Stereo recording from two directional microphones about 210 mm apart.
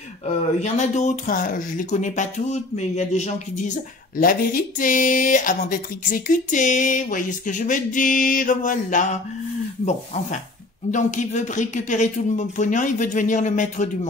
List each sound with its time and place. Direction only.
0.6 s speech: 35° left (ahead or behind)
10.9 s speech: 35° left (ahead or behind)